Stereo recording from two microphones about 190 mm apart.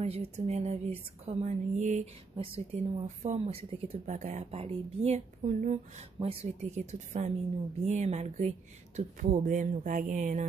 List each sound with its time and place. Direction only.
0.0 s speech: 30° right (ahead or behind)